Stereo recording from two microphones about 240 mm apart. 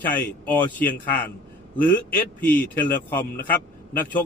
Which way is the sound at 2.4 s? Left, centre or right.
Centre.